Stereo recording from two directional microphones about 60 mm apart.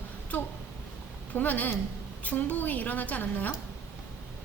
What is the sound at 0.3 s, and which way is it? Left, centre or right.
A woman's voice, left.